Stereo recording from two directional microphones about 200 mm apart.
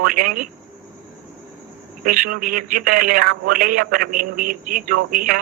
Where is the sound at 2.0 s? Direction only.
45° right (ahead or behind).